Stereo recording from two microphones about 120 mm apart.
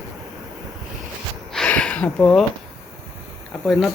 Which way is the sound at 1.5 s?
10° left (ahead or behind).